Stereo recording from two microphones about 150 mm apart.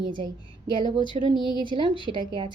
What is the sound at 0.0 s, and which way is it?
A woman's voice, 30° right (ahead or behind).